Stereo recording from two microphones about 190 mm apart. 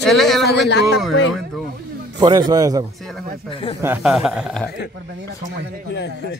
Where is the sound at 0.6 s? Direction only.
65° left (ahead or behind).